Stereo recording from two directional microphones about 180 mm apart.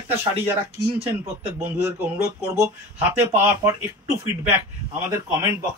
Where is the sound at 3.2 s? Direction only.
15° right (ahead or behind).